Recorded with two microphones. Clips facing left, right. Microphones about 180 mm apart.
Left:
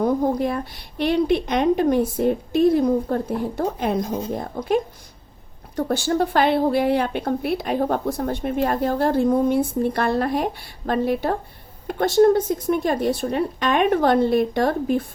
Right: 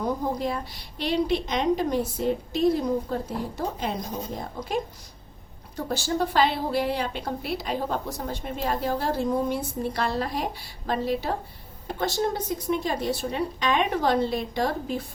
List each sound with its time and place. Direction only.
0.0 s a woman's voice: 55° left (ahead or behind)